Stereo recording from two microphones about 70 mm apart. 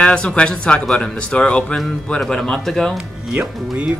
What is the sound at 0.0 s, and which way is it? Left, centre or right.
A man's voice, centre.